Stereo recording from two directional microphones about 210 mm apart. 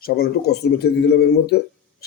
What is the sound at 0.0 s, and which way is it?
Speech, 50° left (ahead or behind).